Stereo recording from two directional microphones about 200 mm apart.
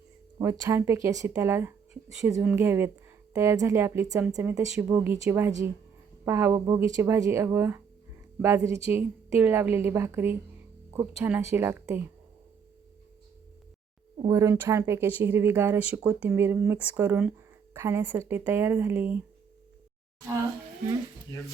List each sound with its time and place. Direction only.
0.6 s speech: 15° right (ahead or behind)
14.2 s speech: 15° right (ahead or behind)